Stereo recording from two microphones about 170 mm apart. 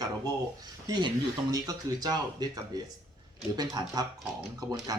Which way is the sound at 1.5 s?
20° right (ahead or behind).